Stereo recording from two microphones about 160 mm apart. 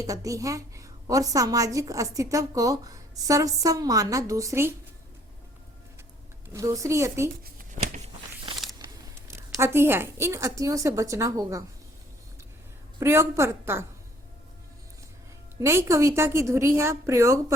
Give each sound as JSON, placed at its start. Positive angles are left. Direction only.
{"t": 0.0, "sound": "a woman's voice", "side_deg": -20}
{"t": 6.5, "sound": "a woman's voice", "side_deg": -20}
{"t": 7.4, "sound": "a sound", "side_deg": -55}
{"t": 8.8, "sound": "a woman's voice", "side_deg": -20}
{"t": 13.0, "sound": "a woman's voice", "side_deg": -15}
{"t": 15.6, "sound": "a woman's voice", "side_deg": -15}